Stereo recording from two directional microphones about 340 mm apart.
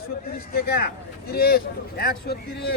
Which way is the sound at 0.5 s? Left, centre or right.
Left.